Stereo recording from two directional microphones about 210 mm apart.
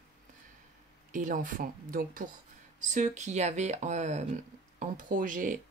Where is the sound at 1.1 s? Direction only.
40° right (ahead or behind).